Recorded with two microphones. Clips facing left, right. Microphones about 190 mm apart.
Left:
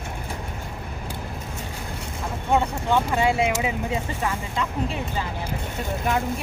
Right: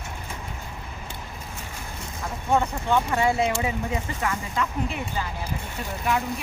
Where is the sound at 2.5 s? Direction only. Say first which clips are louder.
Left 1 dB; 15° left (ahead or behind).